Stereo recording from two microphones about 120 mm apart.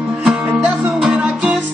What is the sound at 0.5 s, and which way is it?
Music, 15° right (ahead or behind).